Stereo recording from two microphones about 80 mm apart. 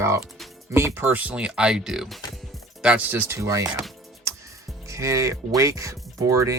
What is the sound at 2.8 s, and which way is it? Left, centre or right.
Speech, centre.